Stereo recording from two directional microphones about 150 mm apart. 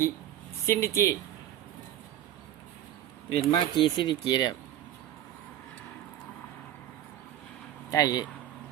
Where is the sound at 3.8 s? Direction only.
30° left (ahead or behind).